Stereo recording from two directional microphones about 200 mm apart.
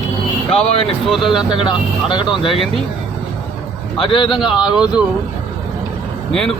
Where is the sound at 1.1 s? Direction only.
Centre (ahead or behind).